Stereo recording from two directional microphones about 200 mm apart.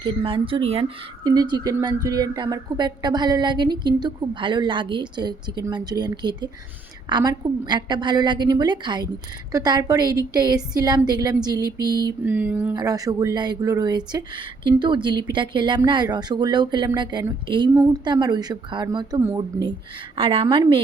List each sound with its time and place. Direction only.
0.0 s speech: 25° right (ahead or behind)
12.2 s a sound: 10° right (ahead or behind)
12.7 s speech: 20° right (ahead or behind)